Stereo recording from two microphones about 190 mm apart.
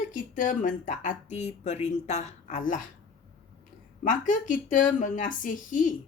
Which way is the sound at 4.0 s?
45° left (ahead or behind).